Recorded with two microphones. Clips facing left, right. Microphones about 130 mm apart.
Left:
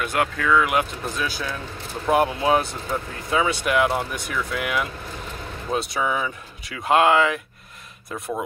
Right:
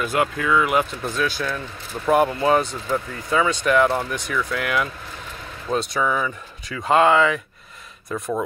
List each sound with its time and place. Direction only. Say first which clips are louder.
0.0 s speech: right 2 dB; centre (ahead or behind)